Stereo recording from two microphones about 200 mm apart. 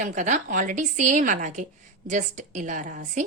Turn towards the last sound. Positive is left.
turn(degrees=-40)  # may be behind; listen again after turning